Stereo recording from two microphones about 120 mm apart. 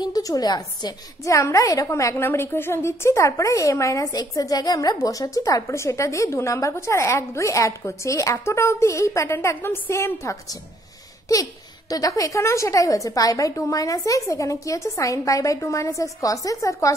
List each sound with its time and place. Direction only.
0.0 s a woman's voice: 30° left (ahead or behind)
11.9 s a woman's voice: 30° left (ahead or behind)